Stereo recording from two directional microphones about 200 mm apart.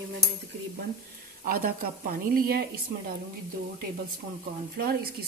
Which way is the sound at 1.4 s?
45° right (ahead or behind).